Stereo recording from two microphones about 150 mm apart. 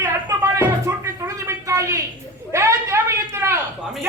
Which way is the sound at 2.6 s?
20° right (ahead or behind).